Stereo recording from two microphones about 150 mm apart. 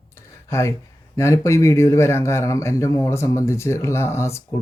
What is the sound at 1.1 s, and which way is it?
Speech, 20° left (ahead or behind).